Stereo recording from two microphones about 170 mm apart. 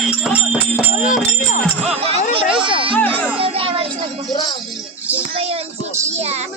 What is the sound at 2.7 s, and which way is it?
Music, 30° right (ahead or behind).